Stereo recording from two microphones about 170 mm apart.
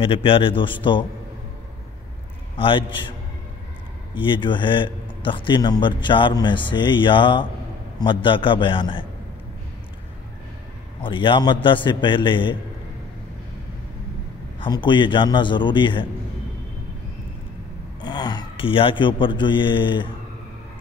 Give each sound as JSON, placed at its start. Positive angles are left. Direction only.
{"t": 0.0, "sound": "a man's voice", "side_deg": 30}
{"t": 2.5, "sound": "a man's voice", "side_deg": 30}
{"t": 11.0, "sound": "a man's voice", "side_deg": 30}
{"t": 14.6, "sound": "a man's voice", "side_deg": 25}
{"t": 18.0, "sound": "speech", "side_deg": 25}